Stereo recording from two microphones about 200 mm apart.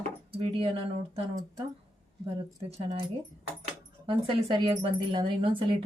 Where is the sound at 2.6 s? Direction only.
30° right (ahead or behind).